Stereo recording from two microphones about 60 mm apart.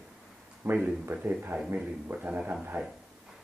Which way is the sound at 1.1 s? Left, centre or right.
Right.